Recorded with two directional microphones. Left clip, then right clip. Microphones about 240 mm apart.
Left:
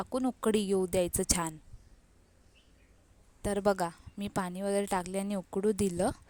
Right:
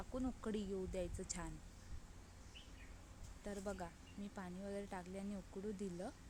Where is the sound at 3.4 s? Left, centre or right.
Left.